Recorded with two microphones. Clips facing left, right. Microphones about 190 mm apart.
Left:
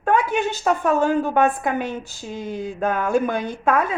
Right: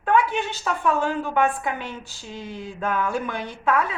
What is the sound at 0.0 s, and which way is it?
A woman's voice, 45° left (ahead or behind).